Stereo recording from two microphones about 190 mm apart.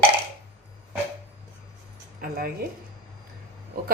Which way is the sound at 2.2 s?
50° right (ahead or behind).